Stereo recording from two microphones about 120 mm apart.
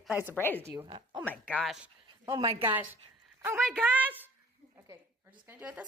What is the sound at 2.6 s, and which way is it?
A woman's voice, 15° right (ahead or behind).